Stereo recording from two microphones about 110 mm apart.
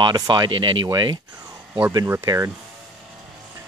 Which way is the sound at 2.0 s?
30° right (ahead or behind).